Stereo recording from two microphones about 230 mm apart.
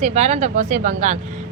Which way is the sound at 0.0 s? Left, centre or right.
Right.